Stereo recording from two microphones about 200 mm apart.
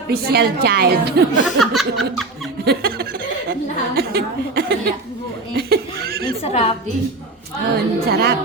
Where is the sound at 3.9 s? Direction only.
50° right (ahead or behind).